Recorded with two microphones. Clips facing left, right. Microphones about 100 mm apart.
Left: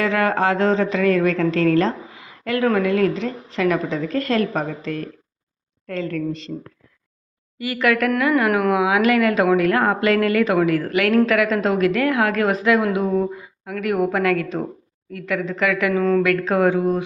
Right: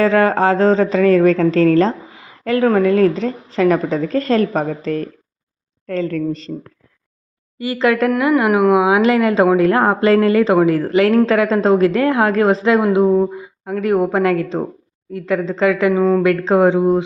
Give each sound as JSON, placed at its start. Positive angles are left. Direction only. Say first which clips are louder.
{"t": 0.0, "sound": "a woman's voice", "louder": "right 6 dB", "side_deg": -30}
{"t": 7.6, "sound": "a woman's voice", "louder": "right 4 dB", "side_deg": -30}